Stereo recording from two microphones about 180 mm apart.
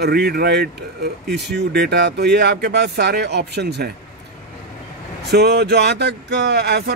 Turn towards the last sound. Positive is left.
turn(degrees=-65)  # may be behind; listen again after turning